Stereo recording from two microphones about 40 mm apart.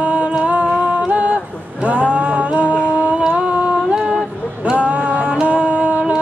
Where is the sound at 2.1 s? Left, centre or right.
Right.